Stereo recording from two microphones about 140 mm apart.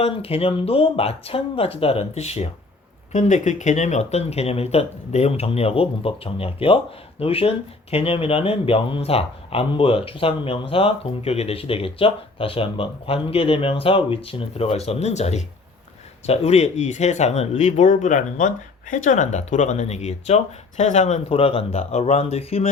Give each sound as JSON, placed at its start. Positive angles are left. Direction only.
{"t": 0.0, "sound": "speech", "side_deg": 45}
{"t": 21.2, "sound": "speech", "side_deg": 40}